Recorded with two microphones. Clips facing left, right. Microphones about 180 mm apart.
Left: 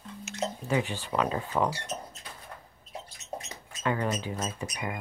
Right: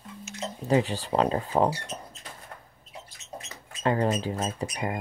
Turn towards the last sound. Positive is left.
turn(degrees=-35)  # may be behind; listen again after turning